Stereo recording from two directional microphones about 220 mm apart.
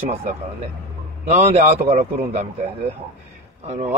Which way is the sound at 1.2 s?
30° right (ahead or behind).